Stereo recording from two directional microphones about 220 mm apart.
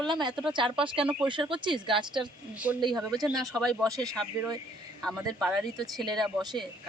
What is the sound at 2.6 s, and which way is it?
Speech, 5° right (ahead or behind).